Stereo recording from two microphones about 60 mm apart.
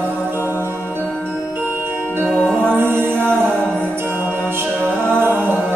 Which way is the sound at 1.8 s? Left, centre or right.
Right.